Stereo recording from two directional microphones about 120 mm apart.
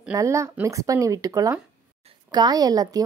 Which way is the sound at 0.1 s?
25° right (ahead or behind).